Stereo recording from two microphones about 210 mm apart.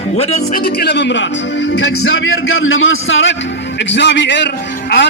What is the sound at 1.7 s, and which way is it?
A man's voice, 85° left.